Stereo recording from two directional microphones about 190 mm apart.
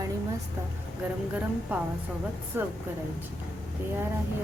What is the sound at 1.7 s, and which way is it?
Speech, 10° right (ahead or behind).